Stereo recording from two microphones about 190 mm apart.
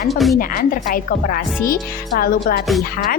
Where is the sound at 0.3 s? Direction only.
50° left (ahead or behind).